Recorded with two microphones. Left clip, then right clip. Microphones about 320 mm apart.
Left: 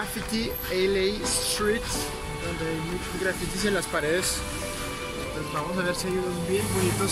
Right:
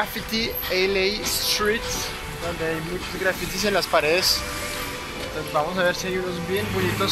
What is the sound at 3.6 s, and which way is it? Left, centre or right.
Speech, right.